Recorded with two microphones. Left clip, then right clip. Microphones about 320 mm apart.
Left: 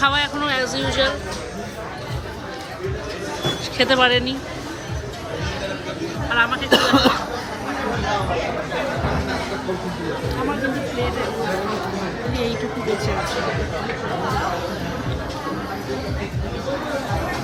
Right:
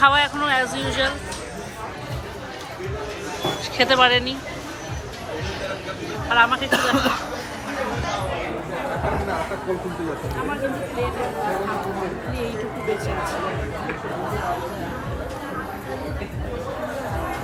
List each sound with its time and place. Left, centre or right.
0.0 s speech: centre
3.8 s speech: centre
6.3 s speech: centre
6.7 s speech: left